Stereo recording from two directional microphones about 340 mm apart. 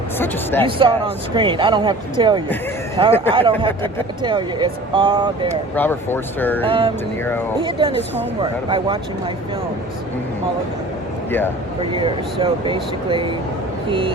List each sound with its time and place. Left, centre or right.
0.6 s speech: centre
5.7 s speech: centre
6.7 s speech: centre
11.8 s speech: centre